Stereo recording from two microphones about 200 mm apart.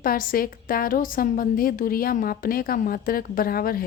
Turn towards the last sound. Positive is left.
turn(degrees=45)  # may be behind; listen again after turning